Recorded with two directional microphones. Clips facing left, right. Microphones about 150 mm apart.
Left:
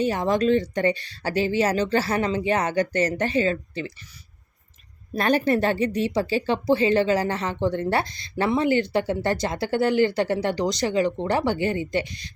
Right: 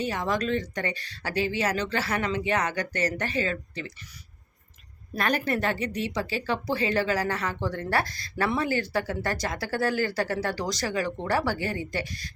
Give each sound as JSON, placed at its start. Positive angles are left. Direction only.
{"t": 0.0, "sound": "speech", "side_deg": 30}
{"t": 5.1, "sound": "speech", "side_deg": 30}